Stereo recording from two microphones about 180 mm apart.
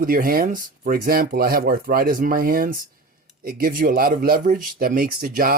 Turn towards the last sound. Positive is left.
turn(degrees=-55)  # may be behind; listen again after turning